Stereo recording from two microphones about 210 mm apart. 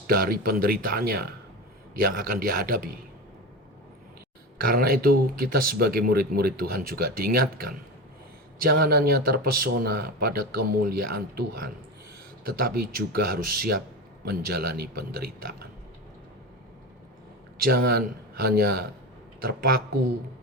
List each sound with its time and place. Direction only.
0.1 s speech: 45° right (ahead or behind)
4.5 s speech: 45° right (ahead or behind)
17.6 s speech: 45° right (ahead or behind)